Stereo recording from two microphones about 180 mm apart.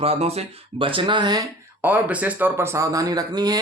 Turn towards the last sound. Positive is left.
turn(degrees=-20)  # may be behind; listen again after turning